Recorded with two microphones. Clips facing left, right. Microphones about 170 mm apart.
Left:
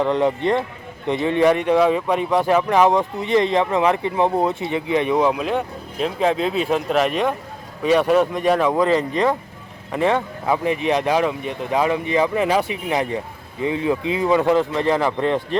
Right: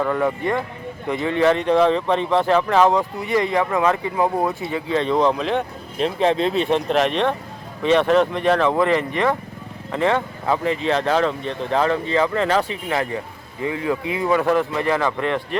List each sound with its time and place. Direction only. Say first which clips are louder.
0.0 s speech: left 2 dB; 20° left (ahead or behind)
9.9 s speech: left 1 dB; 15° left (ahead or behind)